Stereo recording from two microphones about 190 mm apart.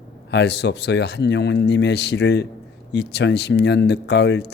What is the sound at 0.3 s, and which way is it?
Speech, 65° left (ahead or behind).